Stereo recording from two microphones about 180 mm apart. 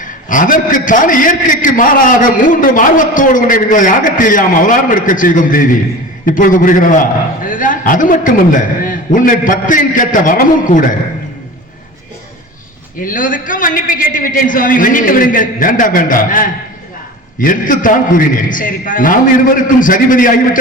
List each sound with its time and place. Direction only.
0.0 s a man's voice: 45° left (ahead or behind)
13.0 s a man's voice: 50° left (ahead or behind)